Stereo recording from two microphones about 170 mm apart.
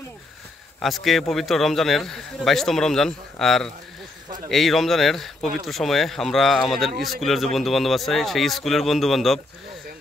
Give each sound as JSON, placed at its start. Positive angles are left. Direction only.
{"t": 0.7, "sound": "speech", "side_deg": 0}